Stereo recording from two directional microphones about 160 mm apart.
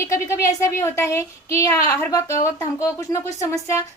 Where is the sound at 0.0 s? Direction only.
20° left (ahead or behind).